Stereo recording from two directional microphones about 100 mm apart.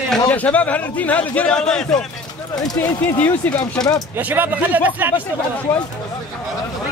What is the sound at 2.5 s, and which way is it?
Speech, 40° left (ahead or behind).